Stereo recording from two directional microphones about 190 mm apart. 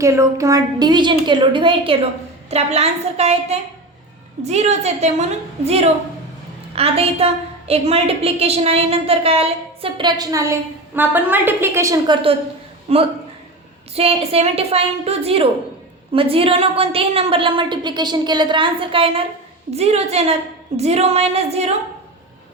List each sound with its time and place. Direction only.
0.0 s a woman's voice: 15° right (ahead or behind)
12.9 s a woman's voice: 35° right (ahead or behind)